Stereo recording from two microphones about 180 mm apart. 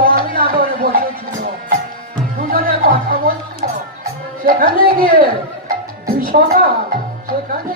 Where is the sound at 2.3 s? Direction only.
50° right (ahead or behind).